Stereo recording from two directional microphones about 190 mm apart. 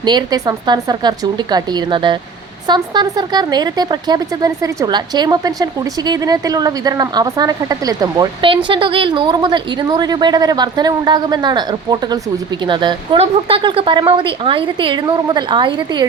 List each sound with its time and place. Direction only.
0.0 s speech: 25° right (ahead or behind)